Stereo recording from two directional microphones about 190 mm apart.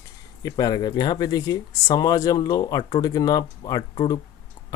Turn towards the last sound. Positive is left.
turn(degrees=20)  # may be behind; listen again after turning